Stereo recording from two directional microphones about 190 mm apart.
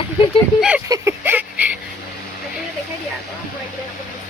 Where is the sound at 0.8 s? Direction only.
15° right (ahead or behind).